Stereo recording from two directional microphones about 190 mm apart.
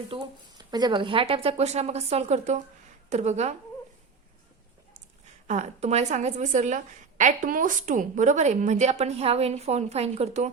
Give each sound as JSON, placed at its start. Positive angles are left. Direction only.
{"t": 0.1, "sound": "a woman's voice", "side_deg": -25}
{"t": 5.5, "sound": "a woman's voice", "side_deg": -35}